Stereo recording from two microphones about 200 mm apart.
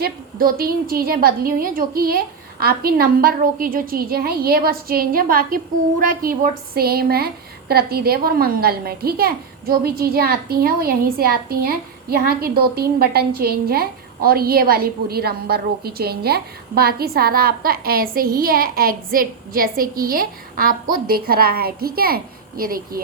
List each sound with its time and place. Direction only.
0.0 s a woman's voice: 50° right (ahead or behind)